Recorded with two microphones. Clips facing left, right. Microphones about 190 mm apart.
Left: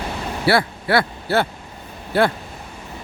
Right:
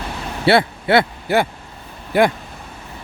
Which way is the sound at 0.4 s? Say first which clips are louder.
Right 4 dB; 25° right (ahead or behind).